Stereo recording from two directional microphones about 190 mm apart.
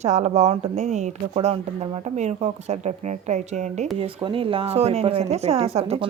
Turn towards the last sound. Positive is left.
turn(degrees=-35)  # may be behind; listen again after turning